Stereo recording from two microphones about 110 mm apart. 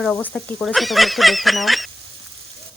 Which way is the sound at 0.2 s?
15° left (ahead or behind).